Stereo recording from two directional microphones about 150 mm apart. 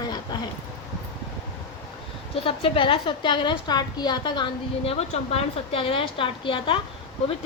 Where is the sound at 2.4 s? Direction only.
35° left (ahead or behind).